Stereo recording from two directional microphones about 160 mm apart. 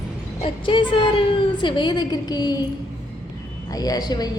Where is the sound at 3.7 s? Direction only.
25° left (ahead or behind).